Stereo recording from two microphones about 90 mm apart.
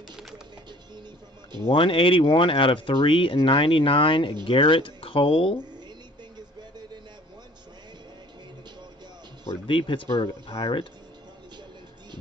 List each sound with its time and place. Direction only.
0.1 s music: 5° right (ahead or behind)
1.7 s speech: 75° left (ahead or behind)
9.7 s speech: 65° left (ahead or behind)
10.2 s speech: 80° left